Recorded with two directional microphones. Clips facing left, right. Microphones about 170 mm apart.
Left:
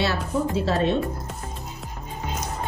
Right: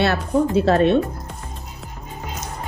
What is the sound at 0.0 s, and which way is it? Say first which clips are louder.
Speech: right 6 dB; 60° right (ahead or behind).